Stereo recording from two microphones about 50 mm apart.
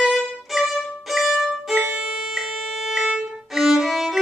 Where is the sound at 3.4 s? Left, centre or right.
Centre.